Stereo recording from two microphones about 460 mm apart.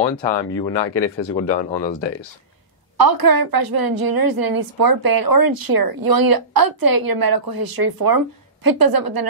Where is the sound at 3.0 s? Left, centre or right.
Right.